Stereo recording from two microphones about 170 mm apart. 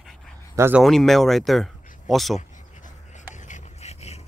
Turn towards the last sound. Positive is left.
turn(degrees=40)  # may be behind; listen again after turning